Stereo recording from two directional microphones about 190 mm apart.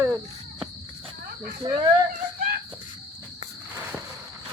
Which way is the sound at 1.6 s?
25° right (ahead or behind).